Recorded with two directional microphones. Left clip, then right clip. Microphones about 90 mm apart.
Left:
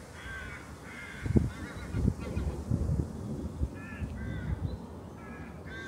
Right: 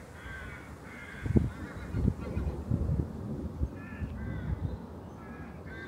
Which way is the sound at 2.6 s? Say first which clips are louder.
Even; centre (ahead or behind).